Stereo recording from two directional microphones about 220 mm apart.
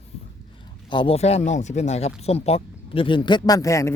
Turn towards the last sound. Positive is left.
turn(degrees=15)  # may be behind; listen again after turning